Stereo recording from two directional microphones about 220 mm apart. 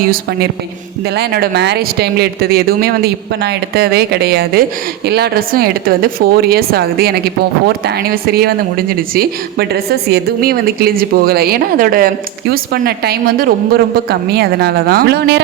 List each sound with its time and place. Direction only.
0.0 s a woman's voice: 45° right (ahead or behind)